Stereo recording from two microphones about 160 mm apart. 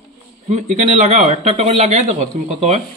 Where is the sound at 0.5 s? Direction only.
50° right (ahead or behind).